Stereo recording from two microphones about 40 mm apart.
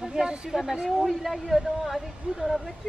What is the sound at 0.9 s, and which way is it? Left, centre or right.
Speech, centre.